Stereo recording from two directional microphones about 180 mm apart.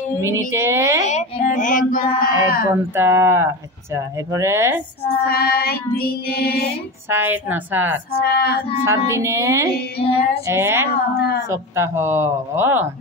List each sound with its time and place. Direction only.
0.2 s speech: 15° right (ahead or behind)
1.0 s a child's voice: 40° left (ahead or behind)
2.7 s speech: 15° right (ahead or behind)
5.2 s child singing: 60° left (ahead or behind)
7.1 s speech: 10° right (ahead or behind)
8.1 s child singing: 60° left (ahead or behind)
8.8 s speech: 15° right (ahead or behind)
11.1 s child singing: 60° left (ahead or behind)
11.5 s speech: 15° right (ahead or behind)